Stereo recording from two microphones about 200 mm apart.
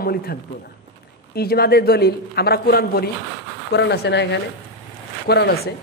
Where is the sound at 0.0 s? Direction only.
50° left (ahead or behind).